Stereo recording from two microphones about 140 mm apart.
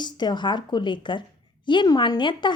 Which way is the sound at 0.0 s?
30° left (ahead or behind).